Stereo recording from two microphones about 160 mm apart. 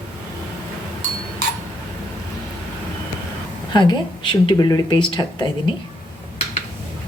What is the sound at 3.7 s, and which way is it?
Speech, 30° left (ahead or behind).